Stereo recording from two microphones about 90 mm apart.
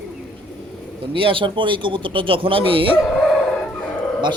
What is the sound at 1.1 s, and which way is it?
Speech, 80° right.